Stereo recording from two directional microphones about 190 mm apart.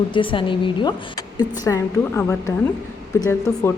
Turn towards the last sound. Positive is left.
turn(degrees=10)  # may be behind; listen again after turning